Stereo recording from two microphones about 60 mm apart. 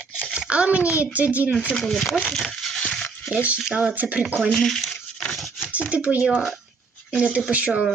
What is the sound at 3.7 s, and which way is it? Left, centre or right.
Speech, right.